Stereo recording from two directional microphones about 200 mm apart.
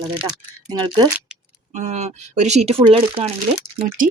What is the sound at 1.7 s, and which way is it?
Speech, 35° right (ahead or behind).